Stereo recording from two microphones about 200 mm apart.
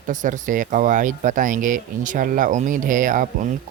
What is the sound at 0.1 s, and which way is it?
Speech, 40° right (ahead or behind).